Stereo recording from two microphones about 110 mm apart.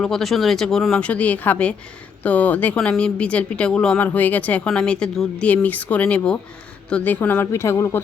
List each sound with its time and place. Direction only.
0.0 s a woman's voice: 5° left (ahead or behind); by 8.0 s 25° left (ahead or behind)